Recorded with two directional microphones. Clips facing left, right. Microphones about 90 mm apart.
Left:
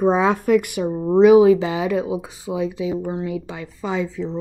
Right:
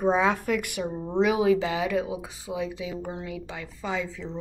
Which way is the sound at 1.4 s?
20° left (ahead or behind).